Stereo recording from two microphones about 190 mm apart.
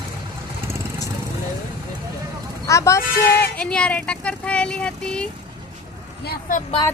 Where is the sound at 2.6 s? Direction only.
15° left (ahead or behind).